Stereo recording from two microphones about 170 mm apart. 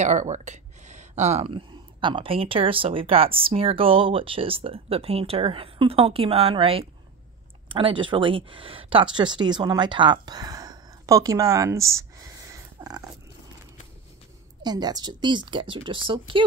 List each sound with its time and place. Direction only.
0.0 s speech: 45° right (ahead or behind); by 13.0 s 20° right (ahead or behind)
14.6 s a woman's voice: 25° right (ahead or behind)